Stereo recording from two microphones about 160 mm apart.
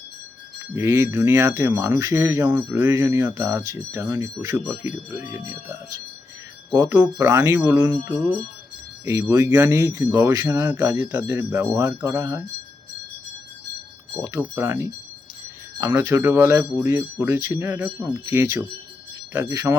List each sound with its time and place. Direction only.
0.8 s speech: 15° right (ahead or behind)
9.0 s speech: 15° right (ahead or behind)
14.1 s speech: 15° right (ahead or behind)